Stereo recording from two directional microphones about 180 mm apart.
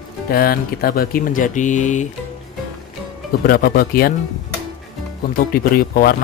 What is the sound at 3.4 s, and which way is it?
Speech, 55° left (ahead or behind).